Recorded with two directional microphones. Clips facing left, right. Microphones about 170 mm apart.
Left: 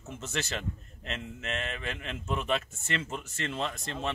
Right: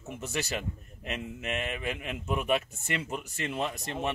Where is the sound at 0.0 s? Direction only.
15° right (ahead or behind).